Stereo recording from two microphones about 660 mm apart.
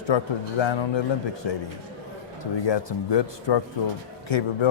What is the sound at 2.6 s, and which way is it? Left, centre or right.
Speech, left.